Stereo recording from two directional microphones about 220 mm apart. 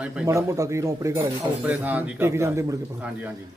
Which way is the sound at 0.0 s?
10° right (ahead or behind).